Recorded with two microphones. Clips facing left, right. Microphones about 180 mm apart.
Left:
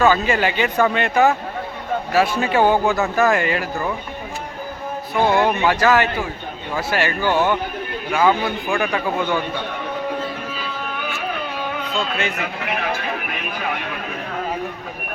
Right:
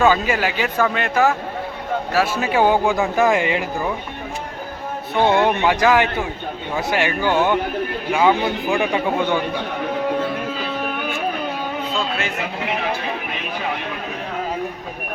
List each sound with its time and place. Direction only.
0.0 s speech: 10° right (ahead or behind)
5.1 s a man's voice: 20° right (ahead or behind)
11.9 s a sound: centre (ahead or behind)
12.6 s speech: 25° right (ahead or behind)